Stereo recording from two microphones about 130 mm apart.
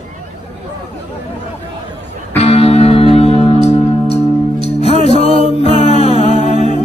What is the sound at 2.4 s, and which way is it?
Music, 50° left (ahead or behind).